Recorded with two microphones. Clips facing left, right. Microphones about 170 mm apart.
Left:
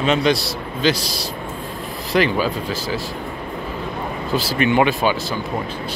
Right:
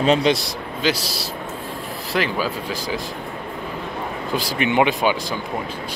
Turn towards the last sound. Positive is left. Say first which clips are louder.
# left 1 dB
turn(degrees=-20)  # may be behind; listen again after turning